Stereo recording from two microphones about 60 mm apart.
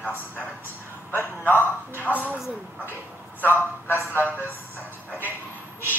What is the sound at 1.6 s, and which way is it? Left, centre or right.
Speech, left.